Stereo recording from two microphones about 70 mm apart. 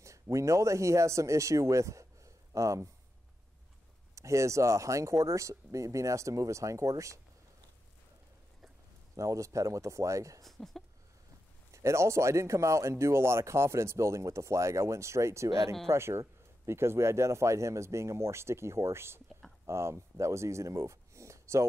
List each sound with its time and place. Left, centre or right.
0.0 s speech: right
4.1 s speech: right
9.1 s speech: right
10.4 s speech: centre
11.7 s speech: right